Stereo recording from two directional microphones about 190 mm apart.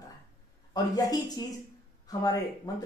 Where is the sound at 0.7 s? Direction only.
20° left (ahead or behind).